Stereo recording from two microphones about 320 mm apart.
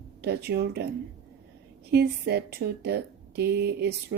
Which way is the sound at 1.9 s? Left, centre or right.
Right.